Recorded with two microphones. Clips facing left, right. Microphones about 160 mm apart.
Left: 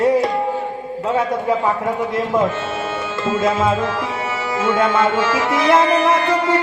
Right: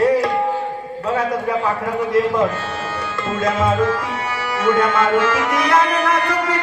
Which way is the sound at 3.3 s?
25° left (ahead or behind).